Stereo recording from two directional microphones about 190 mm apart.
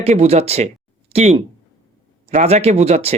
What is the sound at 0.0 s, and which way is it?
Speech, 35° right (ahead or behind).